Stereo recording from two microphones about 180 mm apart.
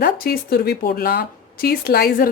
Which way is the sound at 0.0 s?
55° left (ahead or behind).